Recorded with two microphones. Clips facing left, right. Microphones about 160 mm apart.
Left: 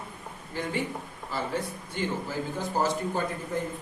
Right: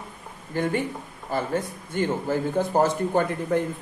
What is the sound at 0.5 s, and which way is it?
Speech, 50° right (ahead or behind).